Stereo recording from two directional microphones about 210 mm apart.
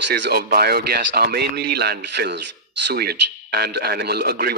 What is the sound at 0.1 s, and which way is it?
Speech, 50° right (ahead or behind).